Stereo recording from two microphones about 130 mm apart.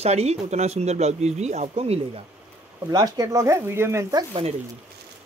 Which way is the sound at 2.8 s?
30° right (ahead or behind).